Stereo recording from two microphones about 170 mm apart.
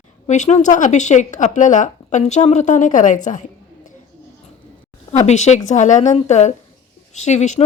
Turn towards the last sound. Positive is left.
turn(degrees=45)  # may be behind; listen again after turning